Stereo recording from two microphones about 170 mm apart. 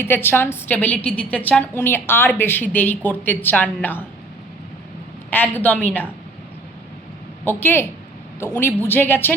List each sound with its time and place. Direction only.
0.0 s speech: 10° left (ahead or behind)
5.3 s speech: 10° left (ahead or behind)
7.4 s speech: 10° left (ahead or behind)
8.9 s speech: 10° left (ahead or behind)